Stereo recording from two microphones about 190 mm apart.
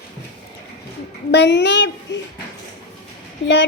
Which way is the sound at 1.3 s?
65° left (ahead or behind).